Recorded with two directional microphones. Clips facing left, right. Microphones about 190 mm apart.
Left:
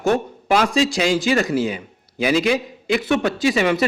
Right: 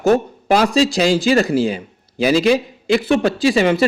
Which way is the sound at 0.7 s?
35° right (ahead or behind).